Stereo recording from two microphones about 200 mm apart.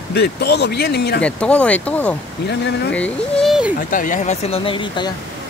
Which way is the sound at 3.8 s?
40° left (ahead or behind).